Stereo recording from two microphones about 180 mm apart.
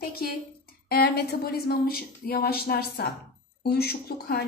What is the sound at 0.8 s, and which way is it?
A woman's voice, 60° left (ahead or behind).